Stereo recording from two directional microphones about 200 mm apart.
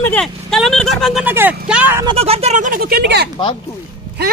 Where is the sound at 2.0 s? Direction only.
30° right (ahead or behind).